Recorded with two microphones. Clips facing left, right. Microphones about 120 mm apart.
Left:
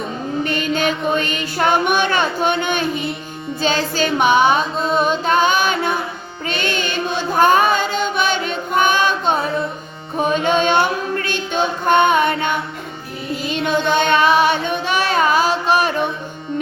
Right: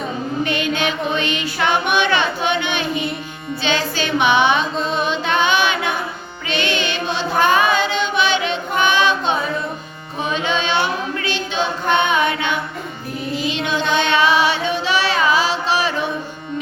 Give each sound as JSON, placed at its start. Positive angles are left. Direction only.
{"t": 0.4, "sound": "music", "side_deg": 40}
{"t": 6.5, "sound": "choir", "side_deg": 45}
{"t": 10.2, "sound": "music", "side_deg": 50}